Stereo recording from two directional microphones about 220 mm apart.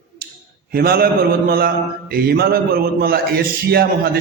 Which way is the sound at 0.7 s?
45° right (ahead or behind).